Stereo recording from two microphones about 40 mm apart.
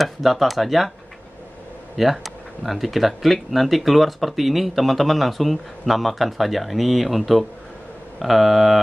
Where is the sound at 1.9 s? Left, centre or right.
Centre.